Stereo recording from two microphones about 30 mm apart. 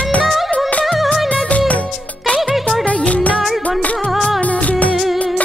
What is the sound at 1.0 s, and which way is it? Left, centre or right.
Music, centre.